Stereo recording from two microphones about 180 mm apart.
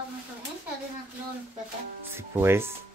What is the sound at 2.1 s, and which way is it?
Speech, 15° right (ahead or behind).